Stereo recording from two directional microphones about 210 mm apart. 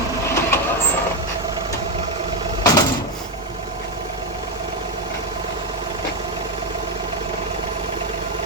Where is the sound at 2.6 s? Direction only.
15° left (ahead or behind).